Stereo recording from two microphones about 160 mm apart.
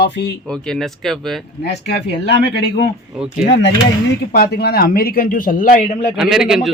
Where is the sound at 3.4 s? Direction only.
90° left.